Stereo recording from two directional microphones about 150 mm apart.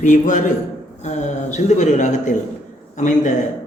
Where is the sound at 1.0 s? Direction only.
50° left (ahead or behind).